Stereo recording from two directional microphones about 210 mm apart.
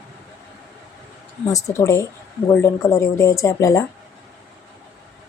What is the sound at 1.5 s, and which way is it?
A woman's voice, 15° left (ahead or behind).